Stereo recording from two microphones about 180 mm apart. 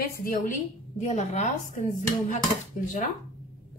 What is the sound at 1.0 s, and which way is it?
Speech, 40° left (ahead or behind).